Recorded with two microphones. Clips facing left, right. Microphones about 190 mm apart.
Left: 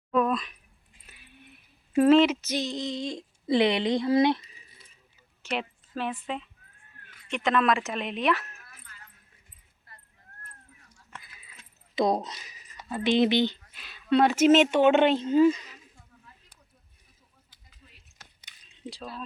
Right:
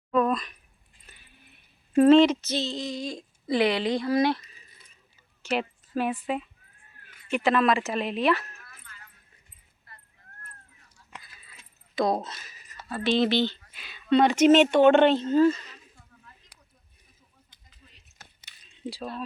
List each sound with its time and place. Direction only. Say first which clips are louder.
0.2 s a sound: right 1 dB; centre (ahead or behind); by 4.6 s 20° left (ahead or behind)
5.4 s speech: right 4 dB; centre (ahead or behind)
11.9 s speech: even; 20° left (ahead or behind)
13.7 s speech: right 2 dB; centre (ahead or behind)
17.5 s a sound: left 2 dB; 5° left (ahead or behind)
18.7 s speech: right 4 dB; centre (ahead or behind)